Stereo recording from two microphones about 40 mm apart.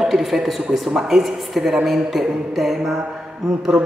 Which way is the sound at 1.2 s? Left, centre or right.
Centre.